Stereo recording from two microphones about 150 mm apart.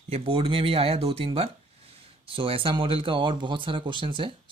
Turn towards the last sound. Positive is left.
turn(degrees=-35)  # may be behind; listen again after turning